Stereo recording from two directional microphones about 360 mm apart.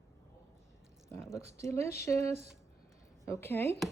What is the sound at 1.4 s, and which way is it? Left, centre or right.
Speech, centre.